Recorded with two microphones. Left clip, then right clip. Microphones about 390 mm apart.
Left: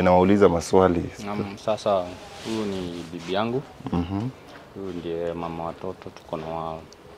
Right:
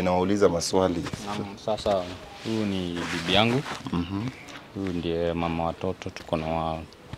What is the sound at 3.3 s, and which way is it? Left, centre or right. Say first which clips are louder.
Speech: right 3 dB; right.